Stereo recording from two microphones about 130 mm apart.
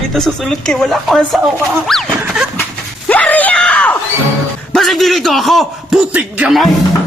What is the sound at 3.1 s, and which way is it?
Screaming, 10° left (ahead or behind).